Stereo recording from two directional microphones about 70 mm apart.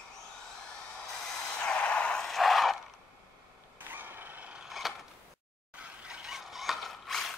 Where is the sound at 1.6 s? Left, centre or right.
Centre.